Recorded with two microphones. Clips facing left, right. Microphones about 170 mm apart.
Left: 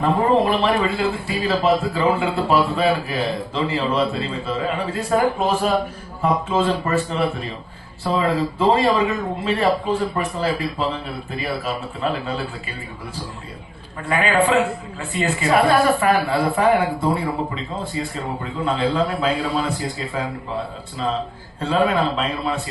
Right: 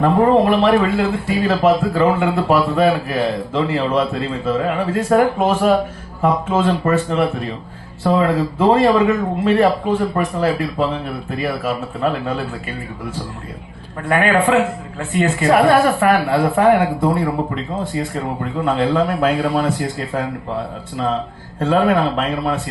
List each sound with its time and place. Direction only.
0.0 s a man's voice: 60° right (ahead or behind)
6.7 s a man's voice: 60° right (ahead or behind)
14.1 s a man's voice: 55° right (ahead or behind)
21.6 s speech: 55° right (ahead or behind)